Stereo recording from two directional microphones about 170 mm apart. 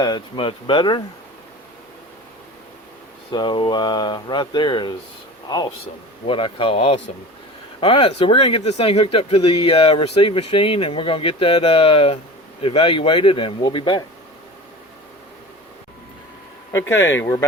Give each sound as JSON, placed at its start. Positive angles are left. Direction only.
{"t": 0.0, "sound": "speech", "side_deg": 30}
{"t": 3.3, "sound": "speech", "side_deg": 25}
{"t": 6.2, "sound": "speech", "side_deg": 30}
{"t": 16.7, "sound": "speech", "side_deg": 15}